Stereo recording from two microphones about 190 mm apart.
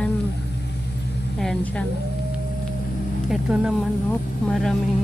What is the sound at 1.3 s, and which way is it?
Speech, 5° left (ahead or behind).